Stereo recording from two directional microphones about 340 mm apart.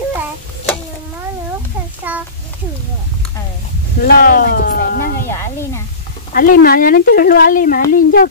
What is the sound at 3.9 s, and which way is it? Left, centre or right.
Speech, left.